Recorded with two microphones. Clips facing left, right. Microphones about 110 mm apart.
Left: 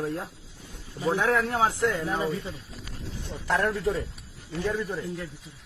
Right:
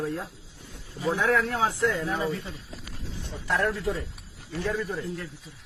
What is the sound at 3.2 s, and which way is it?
Speech, 40° left (ahead or behind).